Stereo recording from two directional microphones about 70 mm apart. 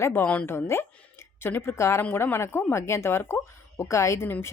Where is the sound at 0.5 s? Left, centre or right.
Left.